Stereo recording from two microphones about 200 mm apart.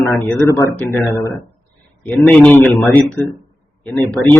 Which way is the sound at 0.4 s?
15° left (ahead or behind).